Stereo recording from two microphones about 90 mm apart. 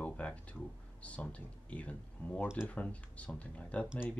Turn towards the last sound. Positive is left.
turn(degrees=15)  # may be behind; listen again after turning